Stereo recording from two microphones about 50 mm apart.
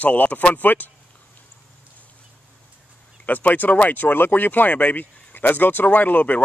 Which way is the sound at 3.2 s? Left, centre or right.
Left.